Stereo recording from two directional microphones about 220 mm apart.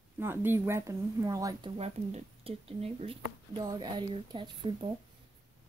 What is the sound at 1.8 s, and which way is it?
Speech, 30° right (ahead or behind).